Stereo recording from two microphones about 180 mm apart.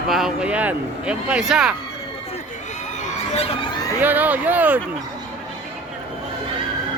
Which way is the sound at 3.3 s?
35° left (ahead or behind).